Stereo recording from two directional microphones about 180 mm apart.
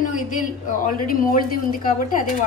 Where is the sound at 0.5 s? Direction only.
50° left (ahead or behind).